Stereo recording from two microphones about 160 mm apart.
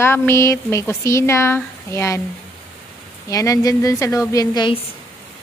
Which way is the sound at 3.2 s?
20° left (ahead or behind).